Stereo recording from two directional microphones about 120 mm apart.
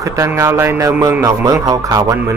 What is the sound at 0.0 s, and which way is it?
Speech, 25° right (ahead or behind).